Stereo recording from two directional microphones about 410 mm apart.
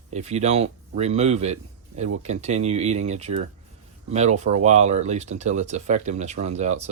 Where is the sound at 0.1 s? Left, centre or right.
Centre.